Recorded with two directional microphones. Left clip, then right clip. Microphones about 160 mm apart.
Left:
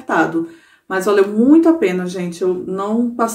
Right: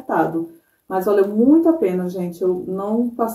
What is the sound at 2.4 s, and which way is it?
Speech, 15° left (ahead or behind).